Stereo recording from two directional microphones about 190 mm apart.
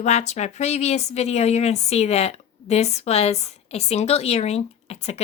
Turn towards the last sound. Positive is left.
turn(degrees=35)  # may be behind; listen again after turning